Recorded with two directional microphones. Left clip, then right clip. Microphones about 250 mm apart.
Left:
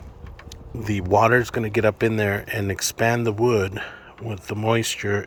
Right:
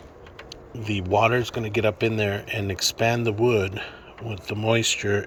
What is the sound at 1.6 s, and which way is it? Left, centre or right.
Speech, left.